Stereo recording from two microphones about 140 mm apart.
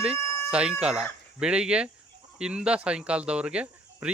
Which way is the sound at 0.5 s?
5° right (ahead or behind).